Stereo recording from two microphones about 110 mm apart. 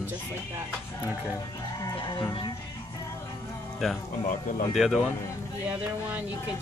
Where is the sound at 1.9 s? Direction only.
50° left (ahead or behind).